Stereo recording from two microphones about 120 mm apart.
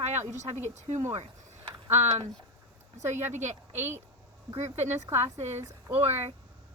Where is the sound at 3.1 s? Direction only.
20° right (ahead or behind).